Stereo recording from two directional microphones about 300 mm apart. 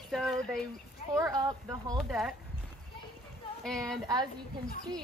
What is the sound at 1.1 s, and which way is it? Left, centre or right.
Speech, centre.